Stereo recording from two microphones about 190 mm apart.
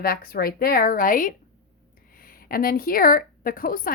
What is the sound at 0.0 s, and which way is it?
A woman's voice, 50° left (ahead or behind).